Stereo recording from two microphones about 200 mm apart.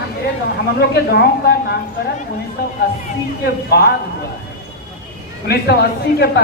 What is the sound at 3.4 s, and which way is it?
Speech, 55° left (ahead or behind).